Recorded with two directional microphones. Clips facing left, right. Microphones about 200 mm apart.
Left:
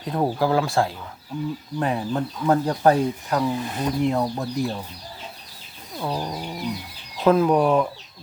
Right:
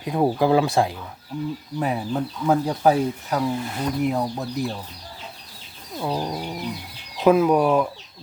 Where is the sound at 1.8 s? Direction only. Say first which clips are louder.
Even; 5° right (ahead or behind).